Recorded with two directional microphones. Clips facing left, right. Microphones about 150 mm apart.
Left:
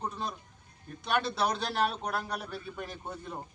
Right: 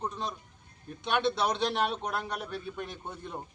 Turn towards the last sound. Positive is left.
turn(degrees=0)  # may be behind; listen again after turning